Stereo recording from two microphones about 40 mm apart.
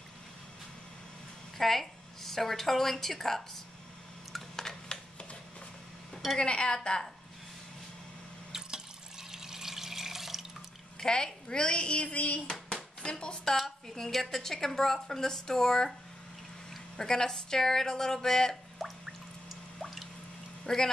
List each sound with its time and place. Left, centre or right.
1.6 s a woman's voice: centre
4.6 s a sound: centre
6.3 s speech: left
8.5 s water: centre
11.0 s speech: centre; by 12.4 s left
13.0 s speech: left
13.6 s a woman's voice: centre
17.0 s a woman's voice: centre
18.8 s drip: centre
20.6 s speech: centre